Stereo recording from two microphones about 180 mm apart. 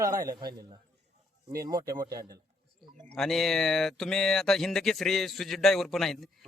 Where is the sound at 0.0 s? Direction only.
20° right (ahead or behind).